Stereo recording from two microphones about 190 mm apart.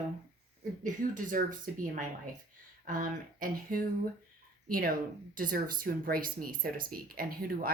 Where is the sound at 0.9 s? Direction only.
45° right (ahead or behind).